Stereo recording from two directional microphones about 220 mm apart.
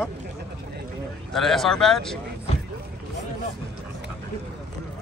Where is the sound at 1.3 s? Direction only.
Centre (ahead or behind).